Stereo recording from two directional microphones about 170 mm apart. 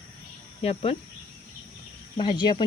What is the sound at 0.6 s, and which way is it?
Speech, 35° left (ahead or behind).